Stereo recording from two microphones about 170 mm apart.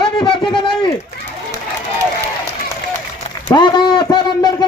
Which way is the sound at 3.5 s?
25° left (ahead or behind).